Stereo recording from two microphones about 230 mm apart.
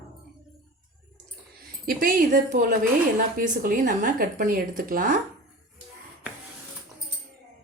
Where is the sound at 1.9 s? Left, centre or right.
Right.